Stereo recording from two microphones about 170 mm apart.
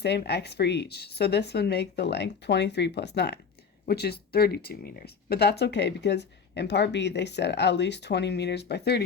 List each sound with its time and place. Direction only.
0.0 s speech: 75° left (ahead or behind)
3.8 s speech: 70° left (ahead or behind)